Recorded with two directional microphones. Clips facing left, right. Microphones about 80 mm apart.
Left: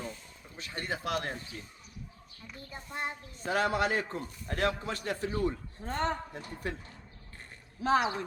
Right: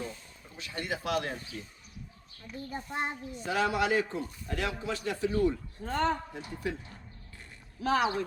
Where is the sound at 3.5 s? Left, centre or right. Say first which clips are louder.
Right 1 dB; left.